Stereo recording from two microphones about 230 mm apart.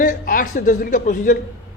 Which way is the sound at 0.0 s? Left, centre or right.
Left.